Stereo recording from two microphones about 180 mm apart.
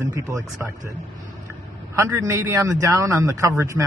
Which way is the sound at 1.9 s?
15° right (ahead or behind).